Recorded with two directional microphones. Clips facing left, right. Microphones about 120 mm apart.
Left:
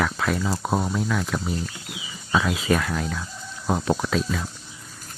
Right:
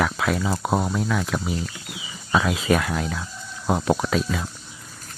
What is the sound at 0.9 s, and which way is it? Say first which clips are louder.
Speech: right 1 dB; centre (ahead or behind).